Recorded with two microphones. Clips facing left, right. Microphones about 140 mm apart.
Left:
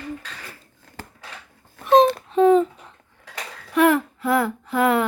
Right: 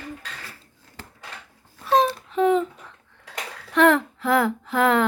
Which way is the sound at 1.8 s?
55° left (ahead or behind).